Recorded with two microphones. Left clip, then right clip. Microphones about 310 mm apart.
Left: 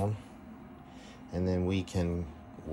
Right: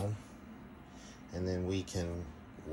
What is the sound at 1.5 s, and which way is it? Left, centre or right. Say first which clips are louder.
Speech: left 4 dB; centre.